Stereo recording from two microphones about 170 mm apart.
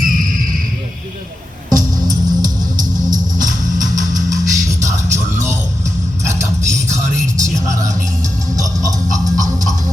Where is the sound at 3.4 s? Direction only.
50° right (ahead or behind).